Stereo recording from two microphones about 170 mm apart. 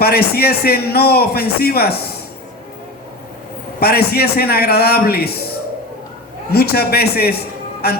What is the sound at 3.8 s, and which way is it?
A man's voice, 65° left (ahead or behind).